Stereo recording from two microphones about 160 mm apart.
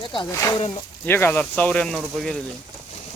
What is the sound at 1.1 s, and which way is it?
Speech, 15° left (ahead or behind).